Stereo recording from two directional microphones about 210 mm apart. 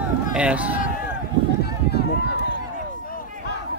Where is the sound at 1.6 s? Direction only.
50° left (ahead or behind).